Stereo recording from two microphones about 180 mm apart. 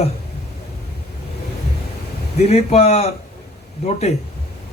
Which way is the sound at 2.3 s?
35° left (ahead or behind).